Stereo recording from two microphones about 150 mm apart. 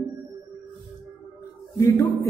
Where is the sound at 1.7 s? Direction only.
20° left (ahead or behind).